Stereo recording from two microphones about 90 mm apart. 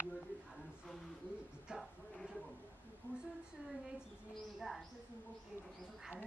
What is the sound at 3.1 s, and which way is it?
Speech, 25° right (ahead or behind).